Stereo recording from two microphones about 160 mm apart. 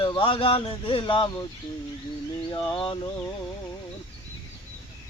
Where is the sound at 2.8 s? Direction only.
30° left (ahead or behind).